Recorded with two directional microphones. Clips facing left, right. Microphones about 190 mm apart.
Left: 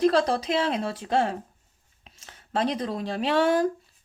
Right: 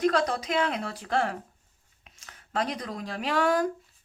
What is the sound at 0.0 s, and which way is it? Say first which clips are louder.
Speech: left 4 dB; 30° left (ahead or behind).